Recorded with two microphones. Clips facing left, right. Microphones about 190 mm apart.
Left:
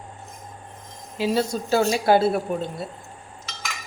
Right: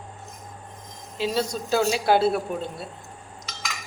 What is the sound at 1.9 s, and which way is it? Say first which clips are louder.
Speech: left 2 dB; 50° left (ahead or behind).